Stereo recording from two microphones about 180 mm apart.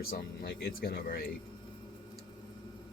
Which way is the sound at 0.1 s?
55° left (ahead or behind).